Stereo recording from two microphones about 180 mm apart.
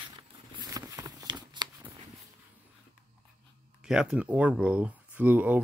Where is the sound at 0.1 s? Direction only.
20° right (ahead or behind).